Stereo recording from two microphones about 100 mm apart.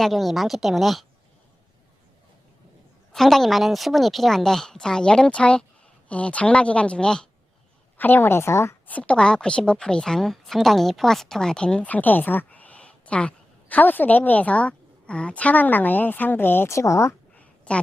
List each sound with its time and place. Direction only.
0.0 s a woman's voice: centre (ahead or behind)
3.1 s a woman's voice: 5° left (ahead or behind)
7.9 s a woman's voice: 20° left (ahead or behind)
8.9 s a woman's voice: 15° left (ahead or behind); by 17.2 s 30° left (ahead or behind)
17.3 s a sound: 15° left (ahead or behind)